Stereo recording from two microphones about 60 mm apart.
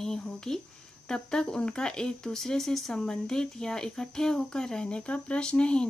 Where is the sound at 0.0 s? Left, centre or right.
Centre.